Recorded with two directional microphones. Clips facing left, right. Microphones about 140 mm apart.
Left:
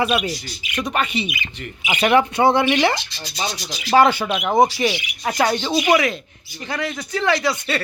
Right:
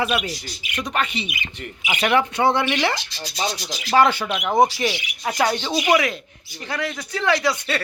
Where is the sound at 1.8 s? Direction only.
25° left (ahead or behind); by 5.8 s 5° left (ahead or behind).